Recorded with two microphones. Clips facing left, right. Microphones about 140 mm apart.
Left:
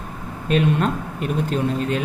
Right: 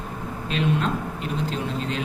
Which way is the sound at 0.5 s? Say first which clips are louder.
Left 5 dB; 50° left (ahead or behind).